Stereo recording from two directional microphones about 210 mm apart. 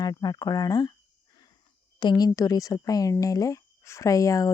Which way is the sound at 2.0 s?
20° left (ahead or behind).